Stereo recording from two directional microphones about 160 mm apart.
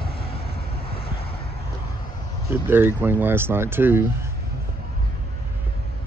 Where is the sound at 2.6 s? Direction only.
15° right (ahead or behind).